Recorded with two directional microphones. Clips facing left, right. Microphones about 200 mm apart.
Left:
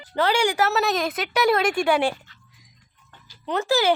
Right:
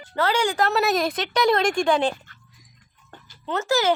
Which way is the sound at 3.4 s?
15° left (ahead or behind).